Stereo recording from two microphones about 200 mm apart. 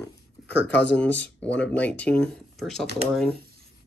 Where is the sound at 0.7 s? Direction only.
60° left (ahead or behind).